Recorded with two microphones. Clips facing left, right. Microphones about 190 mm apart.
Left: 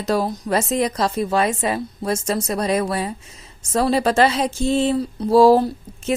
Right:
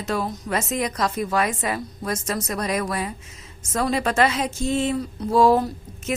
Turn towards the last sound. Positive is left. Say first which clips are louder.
# left 5 dB
turn(degrees=30)  # may be behind; listen again after turning